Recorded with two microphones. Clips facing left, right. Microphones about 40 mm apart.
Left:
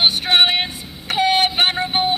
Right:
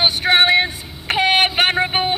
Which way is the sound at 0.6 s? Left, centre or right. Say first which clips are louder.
Right 4 dB; right.